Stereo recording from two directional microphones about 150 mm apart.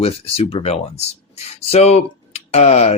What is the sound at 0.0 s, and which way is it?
Speech, 40° left (ahead or behind).